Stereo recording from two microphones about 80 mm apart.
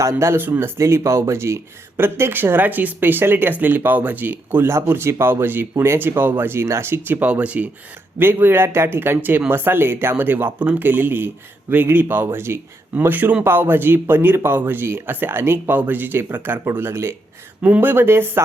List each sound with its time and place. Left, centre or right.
0.0 s speech: right
0.8 s speech: right